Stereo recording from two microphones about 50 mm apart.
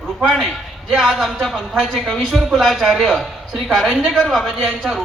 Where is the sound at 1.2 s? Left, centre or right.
Centre.